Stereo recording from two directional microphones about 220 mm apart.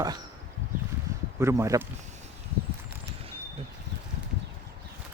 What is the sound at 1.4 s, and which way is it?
Speech, 15° right (ahead or behind).